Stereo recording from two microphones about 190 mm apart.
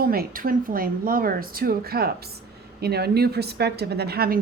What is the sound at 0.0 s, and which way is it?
A woman's voice, 50° right (ahead or behind).